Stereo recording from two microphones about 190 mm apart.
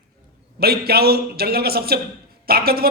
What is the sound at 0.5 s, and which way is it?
A woman's voice, 55° right (ahead or behind).